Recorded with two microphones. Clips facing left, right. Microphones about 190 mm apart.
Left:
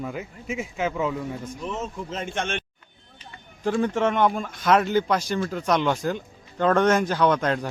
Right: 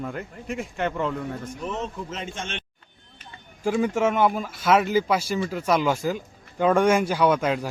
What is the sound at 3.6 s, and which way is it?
Speech, 10° right (ahead or behind).